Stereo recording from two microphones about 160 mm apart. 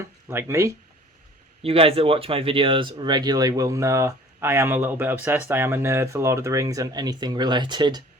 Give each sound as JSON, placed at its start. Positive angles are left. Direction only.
{"t": 0.3, "sound": "speech", "side_deg": -15}
{"t": 1.6, "sound": "speech", "side_deg": -40}